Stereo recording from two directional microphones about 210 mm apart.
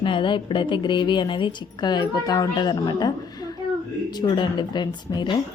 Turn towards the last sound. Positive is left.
turn(degrees=20)  # may be behind; listen again after turning